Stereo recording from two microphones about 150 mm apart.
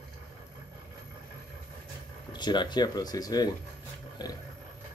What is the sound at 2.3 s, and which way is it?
Speech, 30° left (ahead or behind).